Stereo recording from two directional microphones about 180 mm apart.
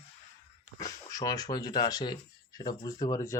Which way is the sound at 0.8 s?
20° left (ahead or behind).